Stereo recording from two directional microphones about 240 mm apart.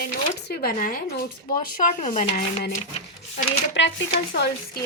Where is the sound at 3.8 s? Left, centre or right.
Left.